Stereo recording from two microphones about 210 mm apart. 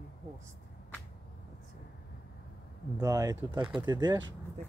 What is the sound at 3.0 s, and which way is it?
Speech, 15° right (ahead or behind).